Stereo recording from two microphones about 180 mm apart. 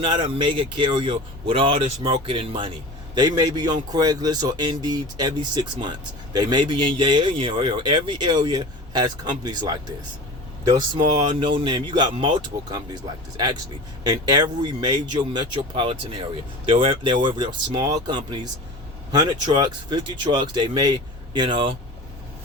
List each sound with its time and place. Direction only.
0.0 s speech: 30° right (ahead or behind)